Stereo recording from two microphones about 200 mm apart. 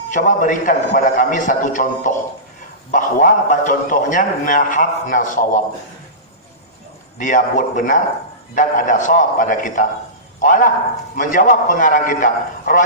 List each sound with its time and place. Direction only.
0.1 s a man's voice: 40° left (ahead or behind)
7.2 s a man's voice: 40° left (ahead or behind)